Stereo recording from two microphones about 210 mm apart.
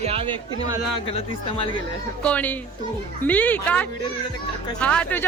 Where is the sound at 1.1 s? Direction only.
25° left (ahead or behind).